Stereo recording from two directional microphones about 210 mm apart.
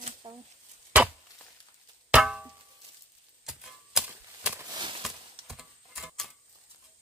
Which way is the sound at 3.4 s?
5° right (ahead or behind).